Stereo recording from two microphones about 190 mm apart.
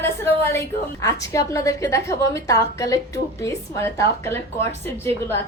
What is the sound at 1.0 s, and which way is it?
A woman's voice, 15° left (ahead or behind).